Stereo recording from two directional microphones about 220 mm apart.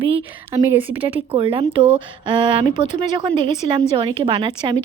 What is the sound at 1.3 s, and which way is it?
A woman's voice, 25° right (ahead or behind).